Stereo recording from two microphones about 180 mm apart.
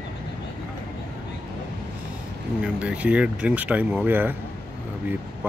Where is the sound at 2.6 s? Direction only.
5° right (ahead or behind).